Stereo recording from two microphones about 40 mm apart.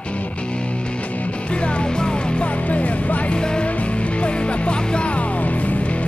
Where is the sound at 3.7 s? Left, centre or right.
Left.